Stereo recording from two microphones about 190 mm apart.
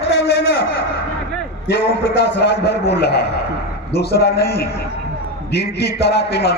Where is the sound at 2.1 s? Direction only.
65° left (ahead or behind).